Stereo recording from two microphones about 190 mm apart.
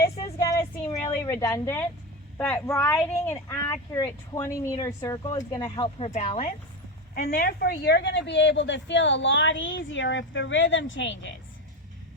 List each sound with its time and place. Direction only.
0.3 s a sound: 15° left (ahead or behind)
2.4 s speech: 10° left (ahead or behind); by 6.5 s 35° left (ahead or behind)
7.2 s a woman's voice: 50° left (ahead or behind); by 11.3 s 75° left (ahead or behind)